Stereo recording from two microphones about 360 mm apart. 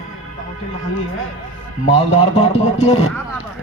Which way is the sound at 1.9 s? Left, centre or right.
Centre.